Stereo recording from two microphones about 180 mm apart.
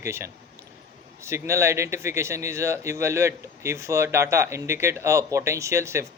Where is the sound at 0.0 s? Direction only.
15° right (ahead or behind).